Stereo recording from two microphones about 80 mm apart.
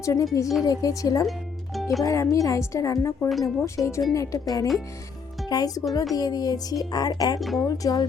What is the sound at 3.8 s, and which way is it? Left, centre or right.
A woman's voice, left.